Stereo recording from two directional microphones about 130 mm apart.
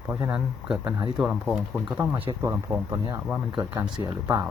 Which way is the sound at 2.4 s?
20° right (ahead or behind).